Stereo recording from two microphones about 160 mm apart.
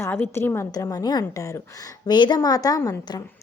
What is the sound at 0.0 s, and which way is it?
A woman's voice, 15° left (ahead or behind).